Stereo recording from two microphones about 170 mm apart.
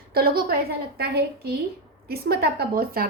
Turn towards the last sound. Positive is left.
turn(degrees=-60)  # may be behind; listen again after turning